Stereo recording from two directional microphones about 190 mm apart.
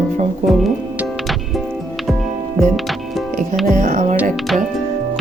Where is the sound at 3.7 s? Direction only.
40° right (ahead or behind).